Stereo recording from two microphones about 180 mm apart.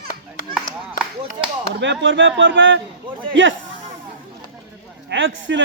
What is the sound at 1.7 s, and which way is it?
A man's voice, 80° right.